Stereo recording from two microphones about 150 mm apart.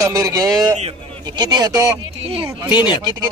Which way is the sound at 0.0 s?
20° right (ahead or behind).